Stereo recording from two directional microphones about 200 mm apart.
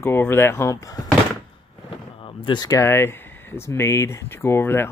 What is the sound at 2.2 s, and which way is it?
Speech, 20° left (ahead or behind).